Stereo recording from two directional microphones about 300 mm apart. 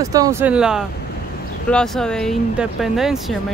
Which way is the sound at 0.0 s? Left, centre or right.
Centre.